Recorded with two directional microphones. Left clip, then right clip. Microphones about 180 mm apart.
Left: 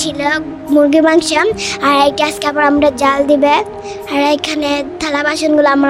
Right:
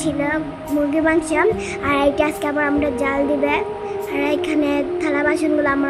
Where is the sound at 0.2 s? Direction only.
50° left (ahead or behind).